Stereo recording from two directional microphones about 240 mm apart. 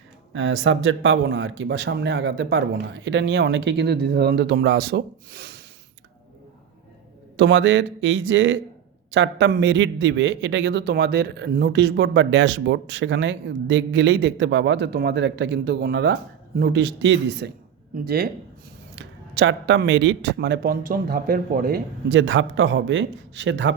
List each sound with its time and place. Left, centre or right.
0.3 s a man's voice: right
7.3 s a man's voice: right